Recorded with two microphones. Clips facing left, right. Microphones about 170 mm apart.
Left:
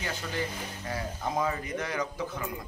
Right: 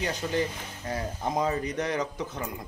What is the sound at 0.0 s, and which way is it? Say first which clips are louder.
Speech: right 5 dB; 20° right (ahead or behind).